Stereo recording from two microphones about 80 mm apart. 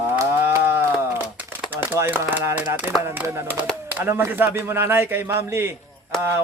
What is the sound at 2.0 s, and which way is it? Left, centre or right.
Speech, right.